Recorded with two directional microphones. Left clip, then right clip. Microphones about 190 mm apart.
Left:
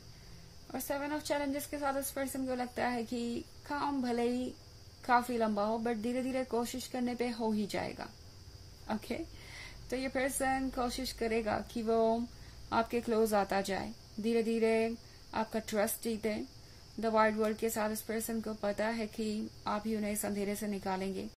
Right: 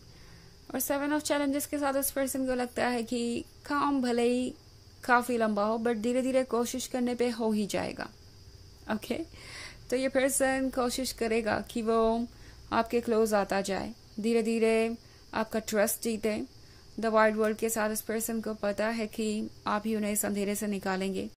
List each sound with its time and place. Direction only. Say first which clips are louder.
0.7 s a woman's voice: right 6 dB; 35° right (ahead or behind)